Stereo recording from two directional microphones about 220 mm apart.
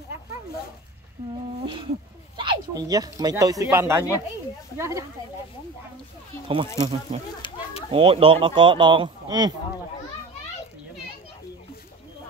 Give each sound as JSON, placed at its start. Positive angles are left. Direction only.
{"t": 2.3, "sound": "speech", "side_deg": -20}
{"t": 6.4, "sound": "speech", "side_deg": -20}